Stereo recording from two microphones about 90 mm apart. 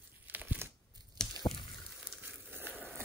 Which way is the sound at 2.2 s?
20° right (ahead or behind).